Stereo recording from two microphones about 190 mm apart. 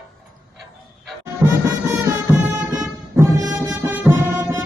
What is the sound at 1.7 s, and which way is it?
Music, 15° right (ahead or behind).